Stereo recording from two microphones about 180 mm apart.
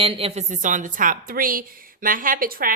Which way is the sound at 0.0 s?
30° right (ahead or behind).